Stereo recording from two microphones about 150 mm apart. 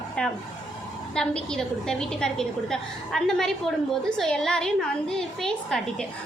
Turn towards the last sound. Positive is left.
turn(degrees=5)  # may be behind; listen again after turning